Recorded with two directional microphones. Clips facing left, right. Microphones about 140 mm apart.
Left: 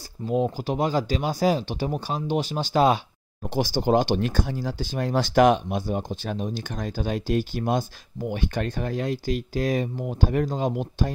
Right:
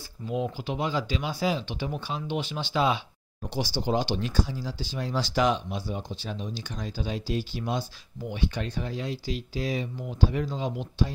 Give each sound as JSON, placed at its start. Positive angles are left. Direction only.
{"t": 0.3, "sound": "speech", "side_deg": 40}